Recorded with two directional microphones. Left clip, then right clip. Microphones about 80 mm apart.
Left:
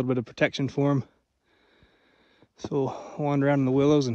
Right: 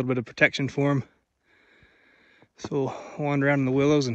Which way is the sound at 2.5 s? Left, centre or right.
Left.